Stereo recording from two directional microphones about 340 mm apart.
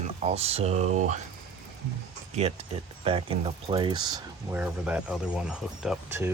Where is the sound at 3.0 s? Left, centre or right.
Centre.